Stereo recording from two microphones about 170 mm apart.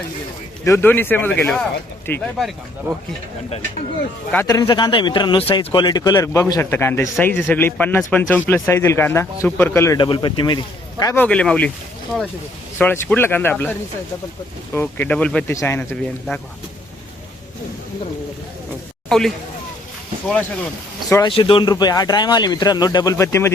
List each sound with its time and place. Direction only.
0.6 s a man's voice: 15° left (ahead or behind)
2.9 s speech: 15° right (ahead or behind)
4.4 s a man's voice: 20° left (ahead or behind)
10.0 s speech: 25° left (ahead or behind)
11.0 s a man's voice: 10° left (ahead or behind)
12.8 s a man's voice: 10° left (ahead or behind)
19.0 s a man's voice: 5° left (ahead or behind)
21.1 s speech: 25° left (ahead or behind)